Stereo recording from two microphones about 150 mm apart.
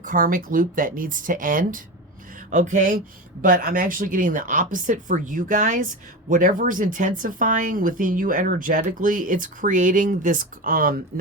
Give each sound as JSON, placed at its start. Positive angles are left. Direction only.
{"t": 0.0, "sound": "a woman's voice", "side_deg": -65}
{"t": 3.4, "sound": "a woman's voice", "side_deg": -70}